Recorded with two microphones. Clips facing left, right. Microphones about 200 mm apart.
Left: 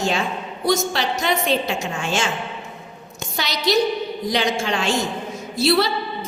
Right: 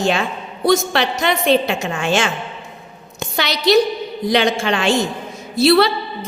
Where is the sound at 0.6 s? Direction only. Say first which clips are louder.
Right 5 dB; 60° right (ahead or behind).